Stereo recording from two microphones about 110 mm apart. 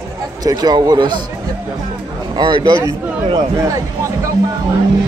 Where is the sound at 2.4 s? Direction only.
45° right (ahead or behind).